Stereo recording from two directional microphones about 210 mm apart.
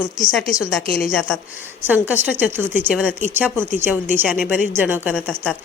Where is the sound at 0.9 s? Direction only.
45° left (ahead or behind).